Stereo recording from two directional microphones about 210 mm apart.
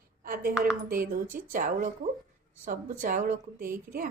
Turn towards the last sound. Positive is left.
turn(degrees=-40)  # may be behind; listen again after turning